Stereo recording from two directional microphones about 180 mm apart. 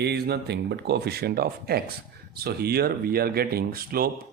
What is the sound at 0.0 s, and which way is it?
Speech, 65° right (ahead or behind).